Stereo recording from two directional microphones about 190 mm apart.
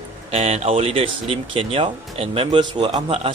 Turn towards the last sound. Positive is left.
turn(degrees=-30)  # may be behind; listen again after turning